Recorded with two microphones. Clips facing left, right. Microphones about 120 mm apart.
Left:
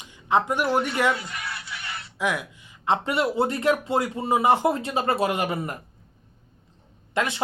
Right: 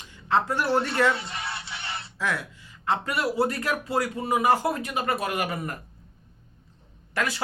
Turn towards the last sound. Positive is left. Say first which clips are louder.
# left 3 dB
turn(degrees=25)  # may be behind; listen again after turning